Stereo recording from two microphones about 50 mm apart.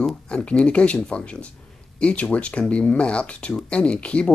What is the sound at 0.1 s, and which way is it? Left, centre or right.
Speech, left.